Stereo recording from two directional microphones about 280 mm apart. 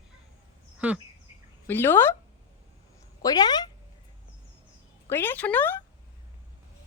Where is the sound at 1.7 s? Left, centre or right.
Centre.